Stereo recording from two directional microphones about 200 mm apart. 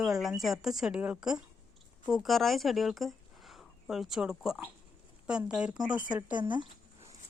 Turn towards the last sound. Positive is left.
turn(degrees=-25)  # may be behind; listen again after turning